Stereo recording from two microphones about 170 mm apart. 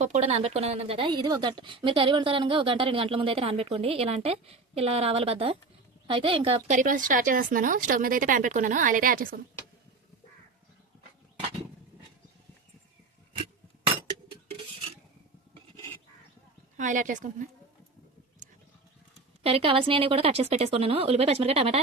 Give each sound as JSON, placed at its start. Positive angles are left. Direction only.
{"t": 0.0, "sound": "a woman's voice", "side_deg": -40}
{"t": 6.7, "sound": "a woman's voice", "side_deg": -50}
{"t": 16.7, "sound": "a woman's voice", "side_deg": -50}
{"t": 19.4, "sound": "a woman's voice", "side_deg": -35}